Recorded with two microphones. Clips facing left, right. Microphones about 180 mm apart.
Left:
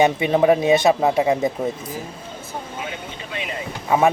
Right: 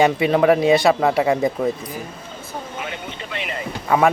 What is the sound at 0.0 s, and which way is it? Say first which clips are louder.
Speech: right 1 dB; 25° left (ahead or behind).